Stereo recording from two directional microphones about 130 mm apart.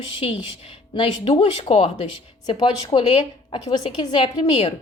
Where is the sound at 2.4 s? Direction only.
35° left (ahead or behind).